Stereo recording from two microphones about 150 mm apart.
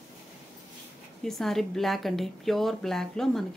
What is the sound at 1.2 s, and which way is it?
A woman's voice, centre (ahead or behind).